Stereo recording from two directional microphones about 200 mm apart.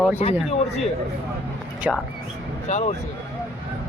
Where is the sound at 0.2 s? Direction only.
35° left (ahead or behind).